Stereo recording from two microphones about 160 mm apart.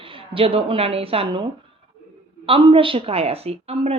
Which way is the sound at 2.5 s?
35° right (ahead or behind).